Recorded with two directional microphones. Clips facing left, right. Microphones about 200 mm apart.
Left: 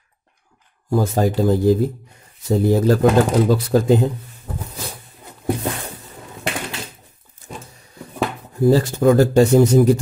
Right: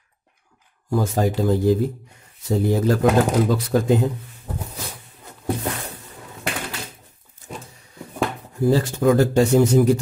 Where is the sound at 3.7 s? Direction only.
35° left (ahead or behind).